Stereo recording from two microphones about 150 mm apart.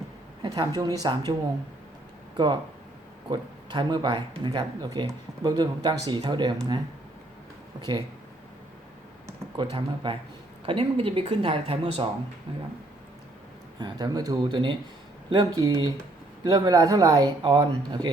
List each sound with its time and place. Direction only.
0.4 s speech: 25° right (ahead or behind)
9.6 s a woman's voice: 35° right (ahead or behind)
13.7 s speech: 30° right (ahead or behind)